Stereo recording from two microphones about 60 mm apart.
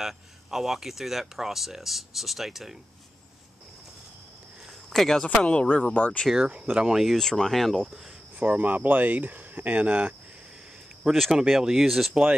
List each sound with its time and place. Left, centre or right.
0.0 s speech: centre
4.9 s speech: centre
5.3 s speech: centre
6.3 s speech: centre
7.1 s speech: centre
8.4 s speech: right
11.1 s speech: centre